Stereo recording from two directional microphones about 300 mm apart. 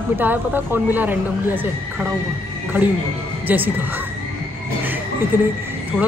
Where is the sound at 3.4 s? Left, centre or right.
Centre.